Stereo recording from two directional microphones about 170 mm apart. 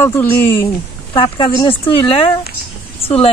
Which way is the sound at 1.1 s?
30° left (ahead or behind).